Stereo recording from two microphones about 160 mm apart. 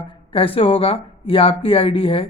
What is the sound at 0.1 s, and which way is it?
Speech, 35° left (ahead or behind).